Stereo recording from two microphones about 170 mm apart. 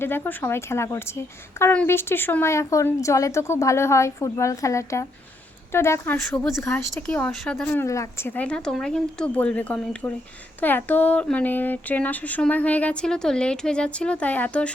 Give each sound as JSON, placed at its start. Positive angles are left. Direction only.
{"t": 0.0, "sound": "speech", "side_deg": 15}